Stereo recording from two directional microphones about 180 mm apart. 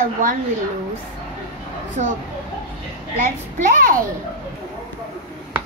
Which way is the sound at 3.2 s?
50° right (ahead or behind).